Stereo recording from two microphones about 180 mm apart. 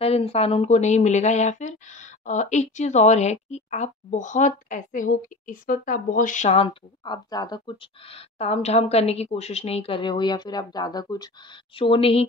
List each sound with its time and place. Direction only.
0.0 s speech: 35° left (ahead or behind)